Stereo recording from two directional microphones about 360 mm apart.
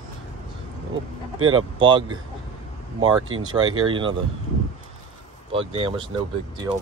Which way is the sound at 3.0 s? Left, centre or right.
Right.